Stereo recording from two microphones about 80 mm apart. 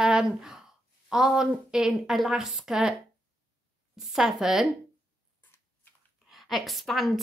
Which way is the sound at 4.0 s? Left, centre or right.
Centre.